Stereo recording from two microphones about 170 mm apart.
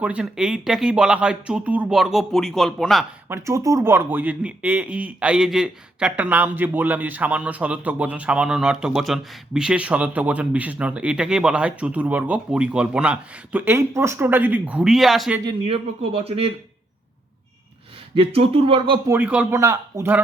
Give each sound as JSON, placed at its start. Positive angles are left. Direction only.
{"t": 0.0, "sound": "speech", "side_deg": -5}
{"t": 3.2, "sound": "speech", "side_deg": -15}
{"t": 15.4, "sound": "speech", "side_deg": -35}
{"t": 18.1, "sound": "speech", "side_deg": -35}
{"t": 19.0, "sound": "speech", "side_deg": -10}